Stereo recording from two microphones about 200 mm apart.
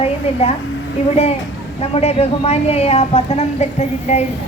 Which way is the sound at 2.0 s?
30° left (ahead or behind).